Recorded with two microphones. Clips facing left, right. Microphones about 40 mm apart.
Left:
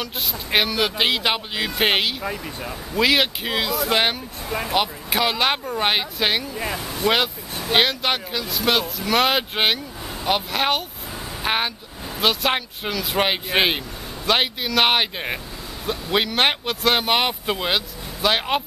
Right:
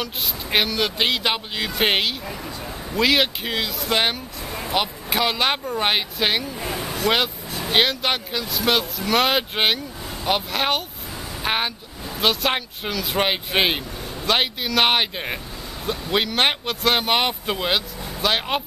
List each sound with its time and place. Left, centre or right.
0.0 s speech: centre
2.3 s speech: centre
2.9 s speech: centre
4.5 s speech: left
4.7 s speech: centre
7.0 s speech: centre